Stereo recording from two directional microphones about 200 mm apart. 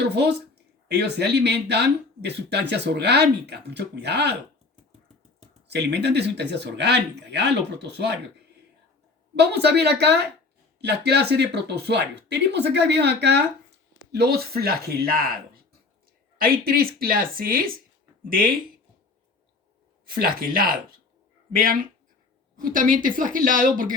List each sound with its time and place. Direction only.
0.0 s speech: 55° right (ahead or behind)
5.6 s speech: 55° right (ahead or behind)
9.3 s speech: 55° right (ahead or behind)
20.1 s a woman's voice: 45° right (ahead or behind)